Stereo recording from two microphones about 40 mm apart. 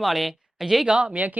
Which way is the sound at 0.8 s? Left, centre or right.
Right.